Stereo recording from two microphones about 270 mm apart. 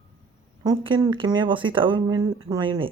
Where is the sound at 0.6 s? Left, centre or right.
Centre.